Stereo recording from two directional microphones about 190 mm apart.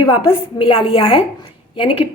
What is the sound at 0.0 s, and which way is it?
A woman's voice, 25° left (ahead or behind).